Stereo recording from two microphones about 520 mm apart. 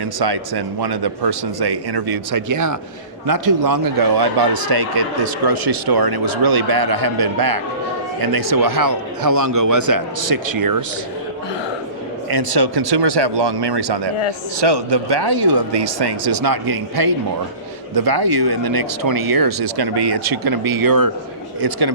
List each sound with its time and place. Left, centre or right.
0.2 s speech: right
12.3 s speech: right